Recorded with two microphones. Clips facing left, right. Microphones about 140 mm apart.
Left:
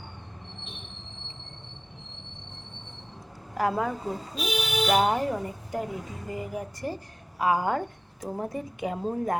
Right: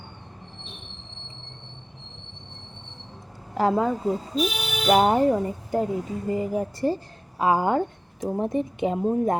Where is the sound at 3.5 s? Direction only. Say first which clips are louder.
Right 5 dB; 25° right (ahead or behind).